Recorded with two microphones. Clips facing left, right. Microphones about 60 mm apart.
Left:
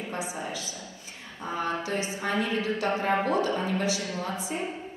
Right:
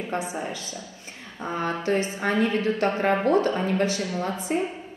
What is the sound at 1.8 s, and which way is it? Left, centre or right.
A woman's voice, right.